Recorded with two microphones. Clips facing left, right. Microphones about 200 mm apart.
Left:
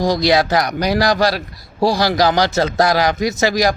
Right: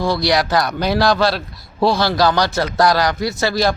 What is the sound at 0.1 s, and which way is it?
A man's voice, 20° left (ahead or behind).